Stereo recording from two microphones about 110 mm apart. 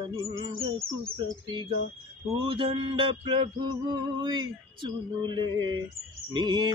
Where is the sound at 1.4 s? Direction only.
45° right (ahead or behind).